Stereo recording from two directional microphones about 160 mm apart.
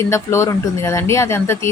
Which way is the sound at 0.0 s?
15° left (ahead or behind).